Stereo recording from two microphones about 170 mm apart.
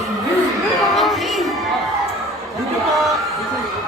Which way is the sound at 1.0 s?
Centre (ahead or behind).